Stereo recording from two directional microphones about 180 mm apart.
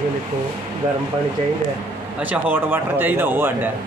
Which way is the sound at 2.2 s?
10° right (ahead or behind).